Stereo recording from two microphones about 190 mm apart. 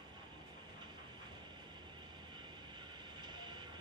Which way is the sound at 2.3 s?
25° right (ahead or behind).